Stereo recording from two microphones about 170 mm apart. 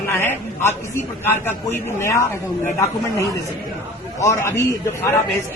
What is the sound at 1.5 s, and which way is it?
Speech, 15° left (ahead or behind).